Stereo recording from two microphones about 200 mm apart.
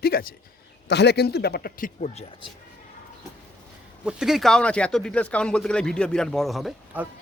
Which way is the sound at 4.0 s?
5° right (ahead or behind).